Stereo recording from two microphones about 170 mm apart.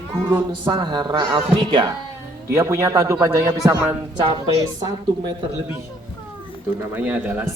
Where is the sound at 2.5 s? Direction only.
15° right (ahead or behind).